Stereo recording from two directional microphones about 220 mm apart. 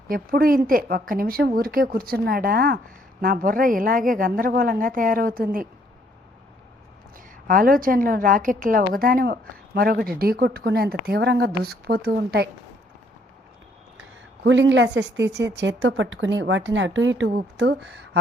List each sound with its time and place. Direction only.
0.1 s speech: 40° right (ahead or behind)
7.4 s a woman's voice: 40° right (ahead or behind)
14.4 s a woman's voice: 55° right (ahead or behind)